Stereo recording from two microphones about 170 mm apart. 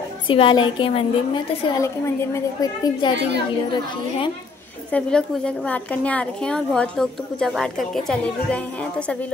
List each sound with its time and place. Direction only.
0.3 s a woman's voice: 30° left (ahead or behind)
1.8 s a woman's voice: 20° left (ahead or behind)
3.2 s a child's voice: 90° right
4.9 s a woman's voice: 5° left (ahead or behind)